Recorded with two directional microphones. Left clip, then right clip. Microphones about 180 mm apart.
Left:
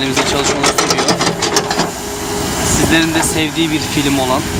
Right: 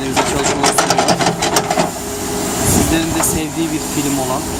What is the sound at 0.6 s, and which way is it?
Sewing machine, 40° right (ahead or behind).